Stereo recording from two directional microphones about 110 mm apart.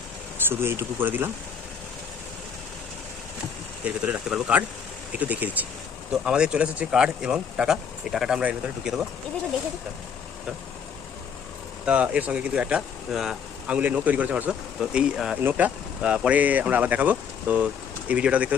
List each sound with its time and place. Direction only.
0.4 s speech: 20° right (ahead or behind)
3.8 s speech: 10° right (ahead or behind)
11.9 s speech: 10° right (ahead or behind)